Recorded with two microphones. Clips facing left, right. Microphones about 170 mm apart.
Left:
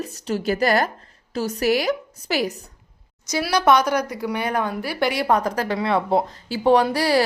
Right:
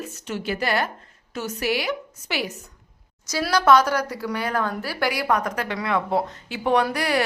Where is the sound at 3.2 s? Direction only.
15° left (ahead or behind).